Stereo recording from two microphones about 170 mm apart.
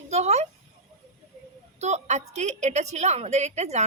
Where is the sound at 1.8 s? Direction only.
40° right (ahead or behind).